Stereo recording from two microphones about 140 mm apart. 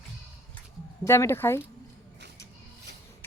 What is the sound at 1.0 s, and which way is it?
Speech, 20° left (ahead or behind).